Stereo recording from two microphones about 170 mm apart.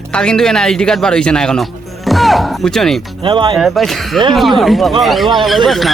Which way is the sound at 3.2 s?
30° right (ahead or behind).